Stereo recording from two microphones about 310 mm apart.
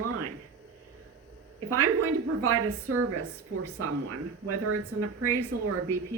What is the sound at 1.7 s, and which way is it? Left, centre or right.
A woman's voice, right.